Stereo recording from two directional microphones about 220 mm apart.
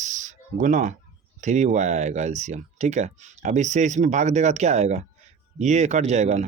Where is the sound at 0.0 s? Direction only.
35° right (ahead or behind).